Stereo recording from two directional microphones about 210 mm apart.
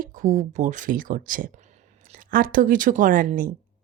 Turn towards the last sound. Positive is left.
turn(degrees=-40)  # may be behind; listen again after turning